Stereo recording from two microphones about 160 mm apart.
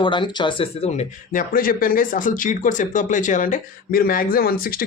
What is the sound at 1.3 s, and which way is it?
Speech, 60° left (ahead or behind).